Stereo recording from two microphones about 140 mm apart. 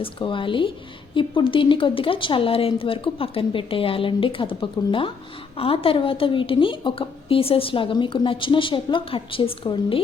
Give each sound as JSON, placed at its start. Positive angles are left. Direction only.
{"t": 0.0, "sound": "a woman's voice", "side_deg": 35}